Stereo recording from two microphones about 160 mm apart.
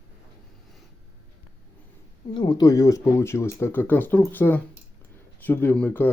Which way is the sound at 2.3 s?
25° left (ahead or behind).